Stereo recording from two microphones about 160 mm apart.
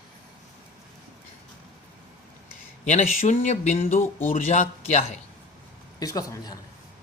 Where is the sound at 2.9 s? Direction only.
45° left (ahead or behind).